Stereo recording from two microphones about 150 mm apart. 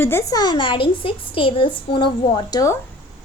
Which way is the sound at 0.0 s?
15° left (ahead or behind).